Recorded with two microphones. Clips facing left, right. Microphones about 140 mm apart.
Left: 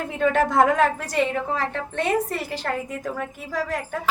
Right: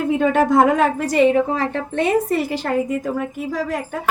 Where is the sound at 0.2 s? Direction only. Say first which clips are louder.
Right 2 dB; 10° right (ahead or behind).